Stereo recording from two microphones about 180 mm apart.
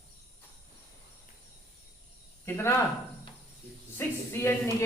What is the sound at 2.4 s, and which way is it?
Speech, 15° left (ahead or behind).